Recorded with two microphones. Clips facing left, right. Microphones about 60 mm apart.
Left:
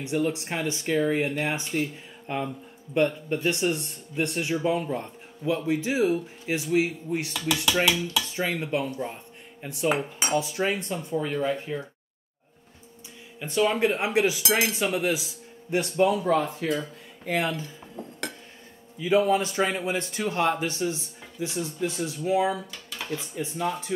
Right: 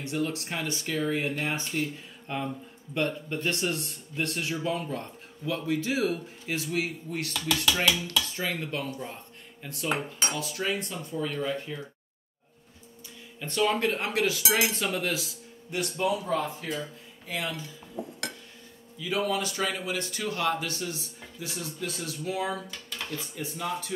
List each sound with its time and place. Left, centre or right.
0.0 s speech: centre
1.4 s dishes: centre
2.9 s speech: centre
3.3 s dishes: centre
4.6 s speech: centre
7.3 s dishes: centre
9.0 s cutlery: centre
10.3 s speech: left
13.4 s dishes: centre
15.7 s speech: left
16.3 s speech: left
18.0 s dishes: centre
18.9 s speech: left
22.5 s speech: centre